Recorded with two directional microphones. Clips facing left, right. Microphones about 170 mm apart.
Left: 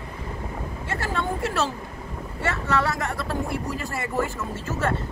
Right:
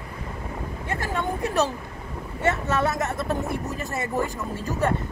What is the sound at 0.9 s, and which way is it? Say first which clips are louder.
Speech: even; 15° right (ahead or behind).